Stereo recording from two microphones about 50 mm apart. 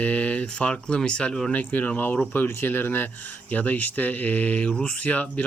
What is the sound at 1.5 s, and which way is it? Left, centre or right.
Speech, left.